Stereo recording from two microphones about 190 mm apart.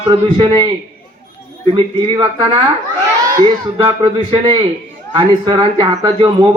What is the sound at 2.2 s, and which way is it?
Speech, 20° right (ahead or behind).